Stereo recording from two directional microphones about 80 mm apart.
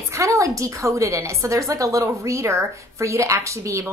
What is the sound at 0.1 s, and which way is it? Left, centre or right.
A woman's voice, right.